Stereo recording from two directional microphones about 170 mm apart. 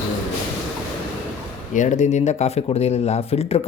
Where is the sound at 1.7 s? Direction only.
45° left (ahead or behind).